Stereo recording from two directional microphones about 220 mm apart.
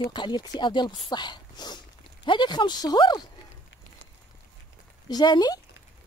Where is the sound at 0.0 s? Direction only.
20° left (ahead or behind).